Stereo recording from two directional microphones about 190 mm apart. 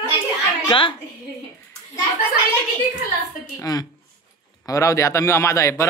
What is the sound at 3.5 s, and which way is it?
Speech, 20° left (ahead or behind).